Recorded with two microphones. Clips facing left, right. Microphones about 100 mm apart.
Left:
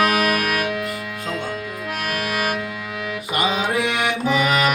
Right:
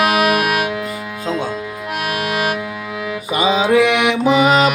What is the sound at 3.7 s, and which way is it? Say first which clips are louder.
Music: right 8 dB; 90° right.